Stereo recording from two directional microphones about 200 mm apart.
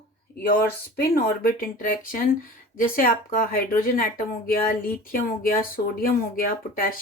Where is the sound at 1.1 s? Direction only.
45° left (ahead or behind).